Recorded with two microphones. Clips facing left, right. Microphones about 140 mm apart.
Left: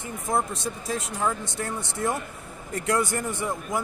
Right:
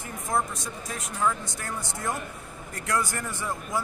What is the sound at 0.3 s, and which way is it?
Speech, 25° left (ahead or behind).